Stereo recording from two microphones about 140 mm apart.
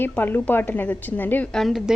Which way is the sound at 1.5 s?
Centre (ahead or behind).